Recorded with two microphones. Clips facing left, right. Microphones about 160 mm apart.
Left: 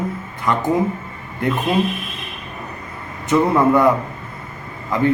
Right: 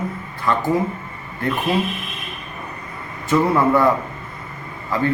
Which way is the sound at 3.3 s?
15° left (ahead or behind).